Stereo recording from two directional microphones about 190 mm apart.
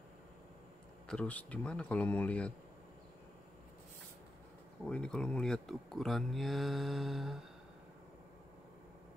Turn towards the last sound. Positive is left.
turn(degrees=0)  # may be behind; listen again after turning